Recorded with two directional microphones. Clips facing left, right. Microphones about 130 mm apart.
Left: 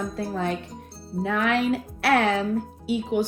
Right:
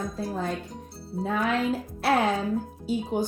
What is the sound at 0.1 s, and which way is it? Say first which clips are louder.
A woman's voice: left 3 dB; 70° left (ahead or behind).